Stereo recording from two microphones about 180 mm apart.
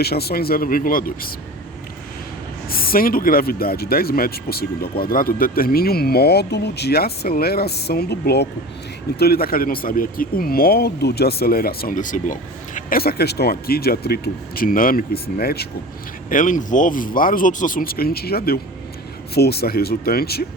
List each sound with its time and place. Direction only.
0.0 s speech: 60° left (ahead or behind)
2.6 s speech: 55° left (ahead or behind)
16.3 s speech: 45° left (ahead or behind)